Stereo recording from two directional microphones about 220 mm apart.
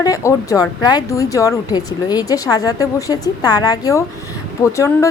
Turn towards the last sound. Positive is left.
turn(degrees=10)  # may be behind; listen again after turning